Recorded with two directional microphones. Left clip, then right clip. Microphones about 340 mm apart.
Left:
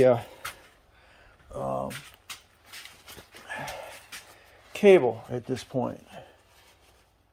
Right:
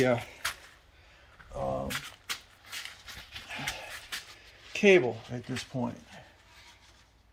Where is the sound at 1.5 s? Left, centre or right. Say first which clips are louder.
Left 2 dB; left.